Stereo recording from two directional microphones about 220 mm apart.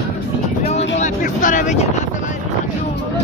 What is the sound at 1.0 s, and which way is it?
Vehicle, 35° left (ahead or behind).